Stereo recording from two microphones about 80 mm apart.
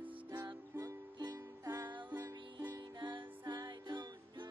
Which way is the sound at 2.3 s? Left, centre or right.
Right.